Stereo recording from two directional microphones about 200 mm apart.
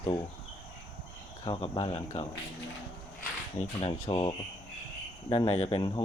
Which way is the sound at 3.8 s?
30° left (ahead or behind).